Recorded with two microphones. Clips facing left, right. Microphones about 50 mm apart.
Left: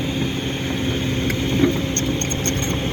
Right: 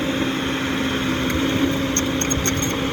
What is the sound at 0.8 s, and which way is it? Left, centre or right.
Vehicle, right.